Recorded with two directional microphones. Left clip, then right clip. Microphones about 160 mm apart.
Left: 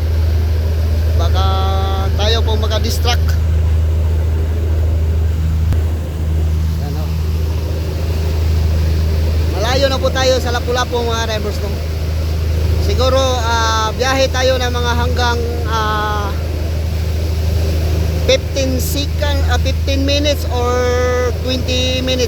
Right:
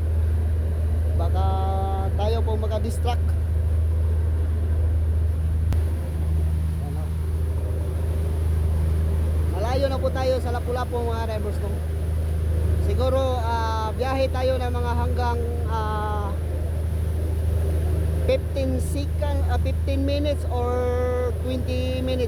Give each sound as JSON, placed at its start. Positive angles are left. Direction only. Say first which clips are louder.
{"t": 1.4, "sound": "vehicle", "louder": "left 8 dB", "side_deg": -20}
{"t": 2.7, "sound": "speech", "louder": "left 10 dB", "side_deg": -20}
{"t": 9.6, "sound": "vehicle", "louder": "left 9 dB", "side_deg": -10}
{"t": 12.9, "sound": "speech", "louder": "left 9 dB", "side_deg": -10}
{"t": 18.3, "sound": "speech", "louder": "left 9 dB", "side_deg": -10}